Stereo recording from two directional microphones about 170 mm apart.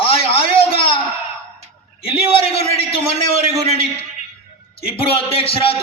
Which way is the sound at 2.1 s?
35° left (ahead or behind).